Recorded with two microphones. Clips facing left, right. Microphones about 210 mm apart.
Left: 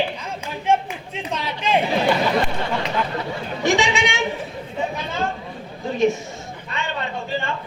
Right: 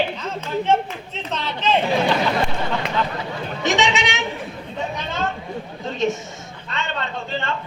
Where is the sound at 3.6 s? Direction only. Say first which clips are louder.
Left 1 dB; 20° right (ahead or behind).